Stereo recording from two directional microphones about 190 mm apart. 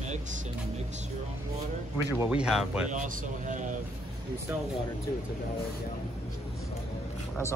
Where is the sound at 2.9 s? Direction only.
40° right (ahead or behind).